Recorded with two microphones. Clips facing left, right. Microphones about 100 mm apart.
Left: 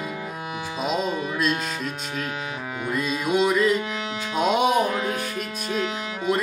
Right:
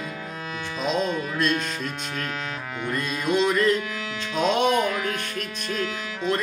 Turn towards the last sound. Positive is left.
turn(degrees=10)  # may be behind; listen again after turning